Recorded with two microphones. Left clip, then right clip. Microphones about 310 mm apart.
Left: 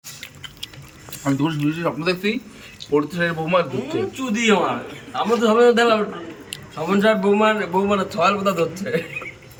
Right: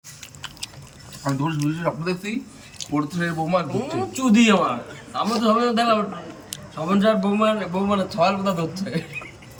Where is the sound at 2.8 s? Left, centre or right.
Right.